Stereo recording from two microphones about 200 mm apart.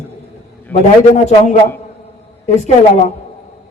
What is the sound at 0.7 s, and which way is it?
Speech, 35° left (ahead or behind).